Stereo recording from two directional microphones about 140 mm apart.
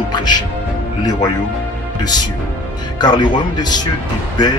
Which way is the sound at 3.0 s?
30° left (ahead or behind).